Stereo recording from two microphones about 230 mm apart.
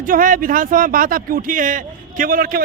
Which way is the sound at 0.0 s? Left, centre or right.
Right.